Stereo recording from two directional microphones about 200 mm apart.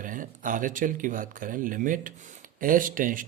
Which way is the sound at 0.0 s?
40° right (ahead or behind).